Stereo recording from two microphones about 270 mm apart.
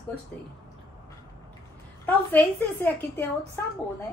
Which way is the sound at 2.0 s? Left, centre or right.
Centre.